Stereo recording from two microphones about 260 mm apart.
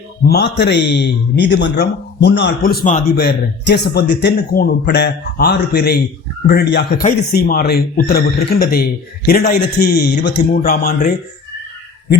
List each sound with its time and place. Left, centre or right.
0.3 s speech: left